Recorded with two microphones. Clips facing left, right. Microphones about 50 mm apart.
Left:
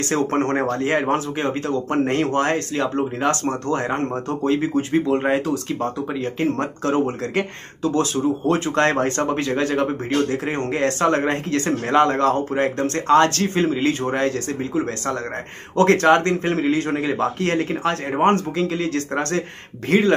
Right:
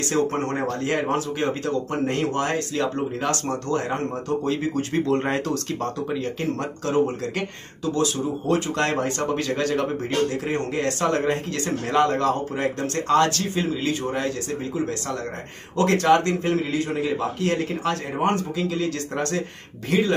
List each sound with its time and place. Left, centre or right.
0.1 s speech: left; by 5.9 s centre
6.2 s speech: left
9.3 s speech: left
15.7 s speech: left